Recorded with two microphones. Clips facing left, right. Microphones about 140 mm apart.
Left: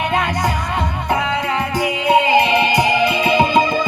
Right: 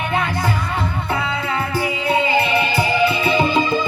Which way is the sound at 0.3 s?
15° left (ahead or behind).